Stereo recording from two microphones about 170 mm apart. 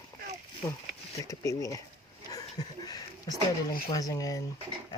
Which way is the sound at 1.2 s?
20° left (ahead or behind).